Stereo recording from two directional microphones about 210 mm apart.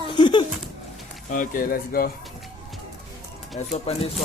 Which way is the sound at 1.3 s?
40° left (ahead or behind).